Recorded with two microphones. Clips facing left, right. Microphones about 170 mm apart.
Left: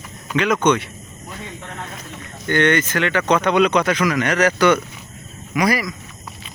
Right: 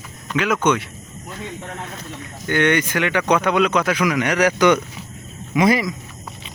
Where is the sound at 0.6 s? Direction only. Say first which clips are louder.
Left 2 dB; 5° right (ahead or behind).